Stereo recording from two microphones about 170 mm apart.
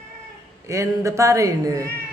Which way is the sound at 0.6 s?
15° right (ahead or behind).